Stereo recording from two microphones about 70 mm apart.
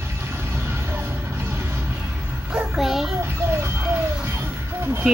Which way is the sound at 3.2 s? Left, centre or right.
Right.